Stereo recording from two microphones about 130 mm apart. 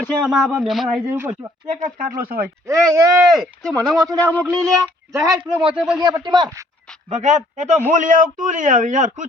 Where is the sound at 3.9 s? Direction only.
25° right (ahead or behind).